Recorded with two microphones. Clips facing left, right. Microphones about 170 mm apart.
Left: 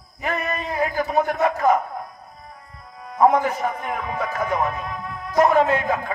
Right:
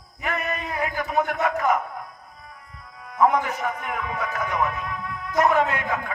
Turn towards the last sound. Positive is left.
turn(degrees=35)  # may be behind; listen again after turning